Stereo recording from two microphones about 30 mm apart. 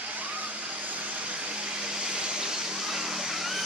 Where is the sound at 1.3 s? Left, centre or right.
Right; by 3.5 s centre.